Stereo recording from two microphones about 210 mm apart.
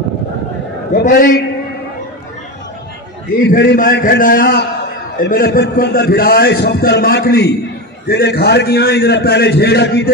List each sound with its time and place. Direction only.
0.9 s a man's voice: 45° left (ahead or behind)
3.3 s a man's voice: 50° left (ahead or behind)